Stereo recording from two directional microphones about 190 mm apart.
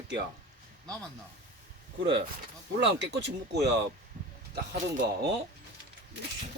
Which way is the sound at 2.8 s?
65° right (ahead or behind).